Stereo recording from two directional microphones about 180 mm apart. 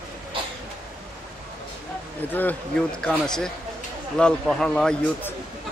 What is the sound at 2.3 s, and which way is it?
Speech, 10° left (ahead or behind).